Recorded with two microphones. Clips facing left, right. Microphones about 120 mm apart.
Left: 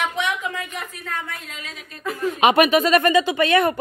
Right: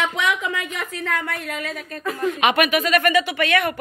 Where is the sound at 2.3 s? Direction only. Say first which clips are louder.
Left 5 dB; 30° left (ahead or behind).